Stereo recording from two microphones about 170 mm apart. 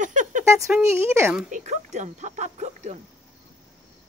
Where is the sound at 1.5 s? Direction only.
45° right (ahead or behind).